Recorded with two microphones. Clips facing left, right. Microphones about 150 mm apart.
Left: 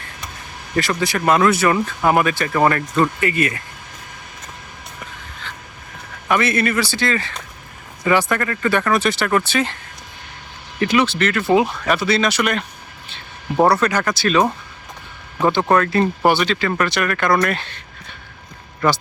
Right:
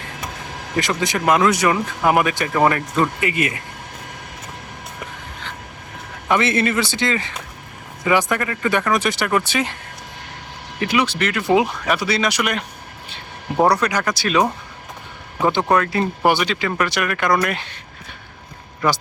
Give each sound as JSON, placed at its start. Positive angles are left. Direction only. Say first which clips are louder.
{"t": 0.8, "sound": "speech", "louder": "left 1 dB", "side_deg": -20}
{"t": 6.2, "sound": "a man's voice", "louder": "even", "side_deg": -20}
{"t": 10.8, "sound": "speech", "louder": "left 3 dB", "side_deg": -10}
{"t": 13.7, "sound": "speech", "louder": "left 1 dB", "side_deg": -15}